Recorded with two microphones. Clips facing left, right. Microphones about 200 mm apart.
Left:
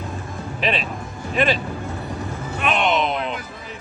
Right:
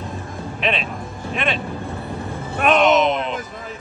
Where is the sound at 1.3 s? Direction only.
Centre (ahead or behind).